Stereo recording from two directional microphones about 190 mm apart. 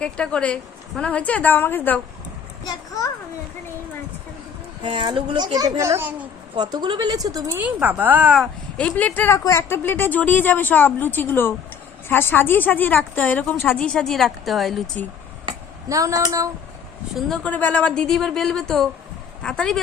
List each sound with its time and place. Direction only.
0.0 s a woman's voice: 5° left (ahead or behind)
2.6 s a sound: 20° left (ahead or behind)
4.8 s speech: 25° right (ahead or behind); by 6.2 s 10° right (ahead or behind)
6.6 s speech: 20° right (ahead or behind); by 8.4 s 5° right (ahead or behind)
8.8 s a woman's voice: 5° left (ahead or behind)
15.4 s a sound: 15° right (ahead or behind)
17.2 s a woman's voice: centre (ahead or behind)